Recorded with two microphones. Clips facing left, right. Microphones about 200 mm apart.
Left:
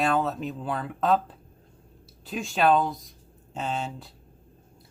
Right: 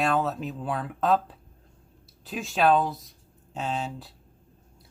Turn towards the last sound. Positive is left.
turn(degrees=0)  # may be behind; listen again after turning